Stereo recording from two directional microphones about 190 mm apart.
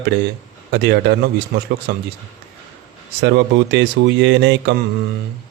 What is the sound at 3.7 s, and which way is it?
Speech, 70° right (ahead or behind).